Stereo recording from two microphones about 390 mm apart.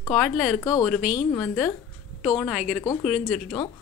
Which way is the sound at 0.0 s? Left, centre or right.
Centre.